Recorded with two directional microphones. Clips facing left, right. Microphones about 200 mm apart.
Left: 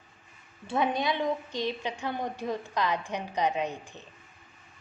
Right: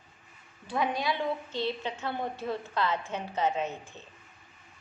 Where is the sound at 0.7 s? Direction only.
20° left (ahead or behind).